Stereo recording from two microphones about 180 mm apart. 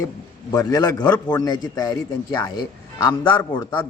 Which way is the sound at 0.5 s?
20° left (ahead or behind).